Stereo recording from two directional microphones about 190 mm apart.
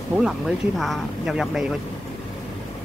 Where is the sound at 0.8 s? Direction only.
Centre (ahead or behind).